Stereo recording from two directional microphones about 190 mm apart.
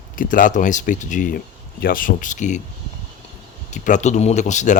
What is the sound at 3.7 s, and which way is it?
Speech, 40° left (ahead or behind).